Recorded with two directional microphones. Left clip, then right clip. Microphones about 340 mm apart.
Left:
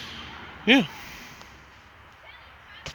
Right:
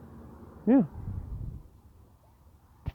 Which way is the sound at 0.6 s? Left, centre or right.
Centre.